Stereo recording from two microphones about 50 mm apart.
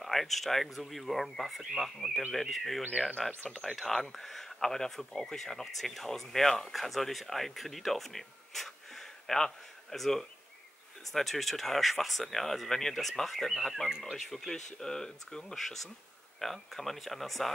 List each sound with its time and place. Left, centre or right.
0.0 s speech: centre
13.8 s speech: centre
14.1 s speech: centre